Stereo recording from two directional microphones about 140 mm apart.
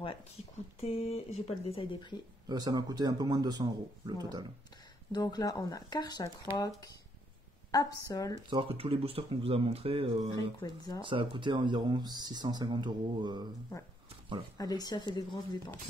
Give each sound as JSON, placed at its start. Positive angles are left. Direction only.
{"t": 0.4, "sound": "speech", "side_deg": 50}
{"t": 2.4, "sound": "speech", "side_deg": -30}
{"t": 5.1, "sound": "speech", "side_deg": 30}
{"t": 7.7, "sound": "speech", "side_deg": 25}
{"t": 8.5, "sound": "speech", "side_deg": -40}
{"t": 13.7, "sound": "speech", "side_deg": 25}